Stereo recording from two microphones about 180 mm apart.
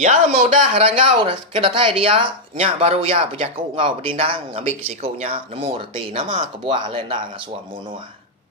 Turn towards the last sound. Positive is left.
turn(degrees=-25)  # may be behind; listen again after turning